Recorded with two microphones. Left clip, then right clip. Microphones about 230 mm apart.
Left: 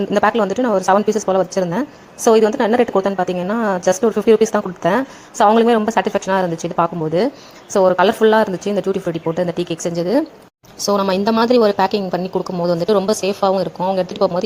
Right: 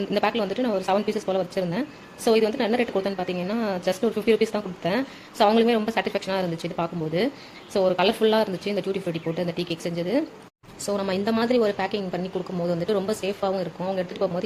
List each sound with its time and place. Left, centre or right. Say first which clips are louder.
0.1 s a woman's voice: left 9 dB; left